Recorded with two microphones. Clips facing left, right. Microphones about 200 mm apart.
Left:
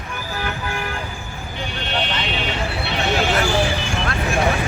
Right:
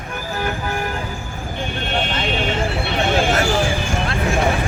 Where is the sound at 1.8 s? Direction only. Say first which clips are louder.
Right 2 dB; 50° right (ahead or behind).